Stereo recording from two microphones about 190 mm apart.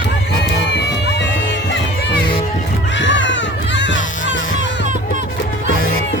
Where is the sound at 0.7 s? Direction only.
65° left (ahead or behind).